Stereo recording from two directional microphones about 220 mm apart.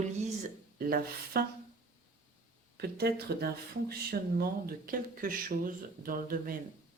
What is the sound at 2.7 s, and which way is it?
Speech, 45° right (ahead or behind).